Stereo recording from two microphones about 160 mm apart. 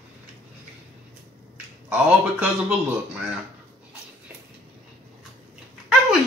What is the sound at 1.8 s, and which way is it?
Speech, 5° right (ahead or behind).